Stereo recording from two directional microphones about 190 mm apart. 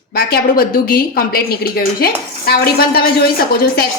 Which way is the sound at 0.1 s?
55° left (ahead or behind).